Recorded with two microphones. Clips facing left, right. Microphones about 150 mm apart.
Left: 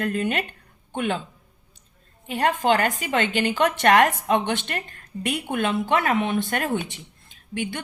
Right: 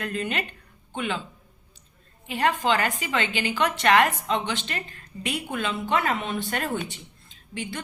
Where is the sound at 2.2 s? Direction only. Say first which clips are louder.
Left 3 dB; 40° left (ahead or behind).